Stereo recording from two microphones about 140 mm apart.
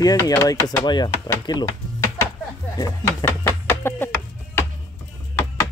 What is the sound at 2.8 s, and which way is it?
Speech, 20° left (ahead or behind).